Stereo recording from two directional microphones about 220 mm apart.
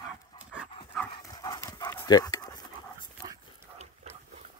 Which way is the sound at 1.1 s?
20° left (ahead or behind).